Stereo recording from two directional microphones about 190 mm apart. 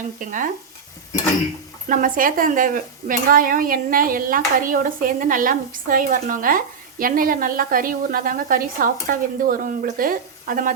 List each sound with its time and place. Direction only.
0.2 s speech: 45° right (ahead or behind)
1.9 s speech: 45° right (ahead or behind)